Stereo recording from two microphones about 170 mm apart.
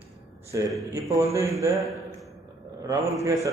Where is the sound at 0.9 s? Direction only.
20° right (ahead or behind).